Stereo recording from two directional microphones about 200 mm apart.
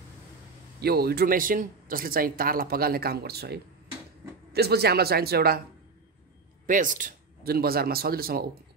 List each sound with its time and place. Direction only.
0.7 s speech: 50° right (ahead or behind)
6.6 s a man's voice: 40° right (ahead or behind)